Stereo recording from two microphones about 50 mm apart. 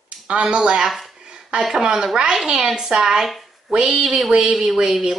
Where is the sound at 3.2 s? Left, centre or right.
Centre.